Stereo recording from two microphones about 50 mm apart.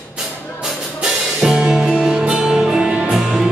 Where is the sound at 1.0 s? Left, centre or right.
Centre.